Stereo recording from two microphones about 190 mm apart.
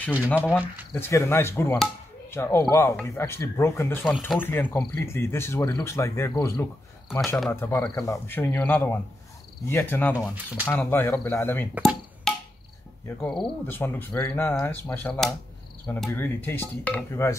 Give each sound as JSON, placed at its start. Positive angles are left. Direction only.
{"t": 0.9, "sound": "speech", "side_deg": 15}
{"t": 7.3, "sound": "speech", "side_deg": 5}
{"t": 7.7, "sound": "speech", "side_deg": 15}
{"t": 10.1, "sound": "speech", "side_deg": -5}
{"t": 10.7, "sound": "speech", "side_deg": 10}
{"t": 11.8, "sound": "wood block", "side_deg": 0}
{"t": 13.2, "sound": "speech", "side_deg": 5}